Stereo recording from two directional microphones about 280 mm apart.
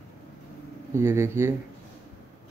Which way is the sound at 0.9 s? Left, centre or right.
Centre.